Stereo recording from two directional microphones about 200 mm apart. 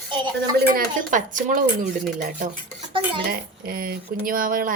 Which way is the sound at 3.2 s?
45° right (ahead or behind).